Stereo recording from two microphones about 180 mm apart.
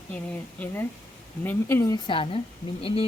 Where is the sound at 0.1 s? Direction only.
10° left (ahead or behind).